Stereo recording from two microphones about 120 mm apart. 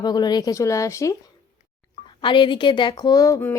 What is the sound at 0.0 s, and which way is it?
Speech, 35° left (ahead or behind).